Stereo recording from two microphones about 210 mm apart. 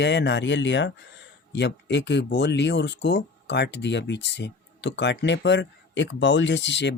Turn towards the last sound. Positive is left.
turn(degrees=55)  # may be behind; listen again after turning